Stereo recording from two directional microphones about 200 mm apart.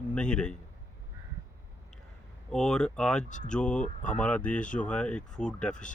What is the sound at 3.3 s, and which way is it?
Speech, 40° left (ahead or behind).